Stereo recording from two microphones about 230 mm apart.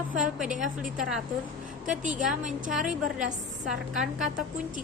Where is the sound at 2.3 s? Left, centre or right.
Right.